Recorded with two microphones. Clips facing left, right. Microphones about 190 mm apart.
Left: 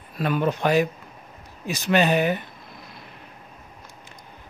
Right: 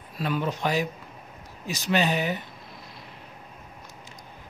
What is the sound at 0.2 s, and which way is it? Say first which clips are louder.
A man's voice: left 5 dB; 55° left (ahead or behind).